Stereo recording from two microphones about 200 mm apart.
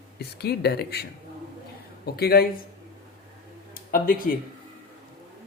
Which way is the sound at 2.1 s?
50° left (ahead or behind).